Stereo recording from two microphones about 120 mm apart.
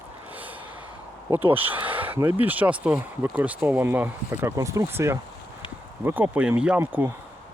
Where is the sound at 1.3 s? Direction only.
15° right (ahead or behind).